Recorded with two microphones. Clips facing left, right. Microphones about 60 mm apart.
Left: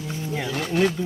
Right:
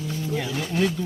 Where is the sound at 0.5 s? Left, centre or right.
Left.